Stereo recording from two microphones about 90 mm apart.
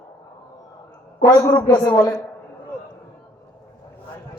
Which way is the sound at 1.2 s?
40° left (ahead or behind).